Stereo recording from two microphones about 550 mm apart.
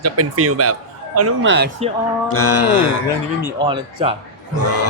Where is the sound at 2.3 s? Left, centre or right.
Left.